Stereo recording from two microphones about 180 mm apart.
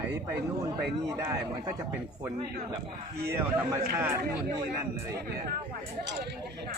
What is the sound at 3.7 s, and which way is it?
Speech, 15° right (ahead or behind).